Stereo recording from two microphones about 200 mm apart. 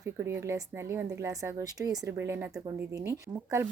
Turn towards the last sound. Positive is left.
turn(degrees=-15)  # may be behind; listen again after turning